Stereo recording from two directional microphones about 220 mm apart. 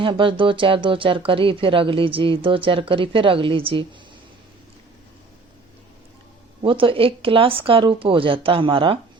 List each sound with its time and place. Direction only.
0.0 s speech: 25° right (ahead or behind)
6.6 s speech: 25° right (ahead or behind)